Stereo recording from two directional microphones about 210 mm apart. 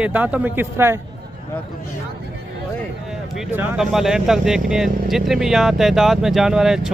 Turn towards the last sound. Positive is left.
turn(degrees=0)  # may be behind; listen again after turning